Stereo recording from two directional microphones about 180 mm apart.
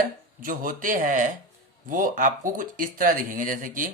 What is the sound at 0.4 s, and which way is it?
A man's voice, 50° right (ahead or behind).